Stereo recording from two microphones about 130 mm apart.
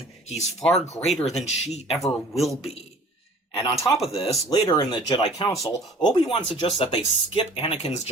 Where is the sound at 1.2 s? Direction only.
55° left (ahead or behind).